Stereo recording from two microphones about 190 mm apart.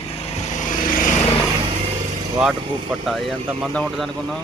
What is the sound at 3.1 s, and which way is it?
Speech, centre (ahead or behind).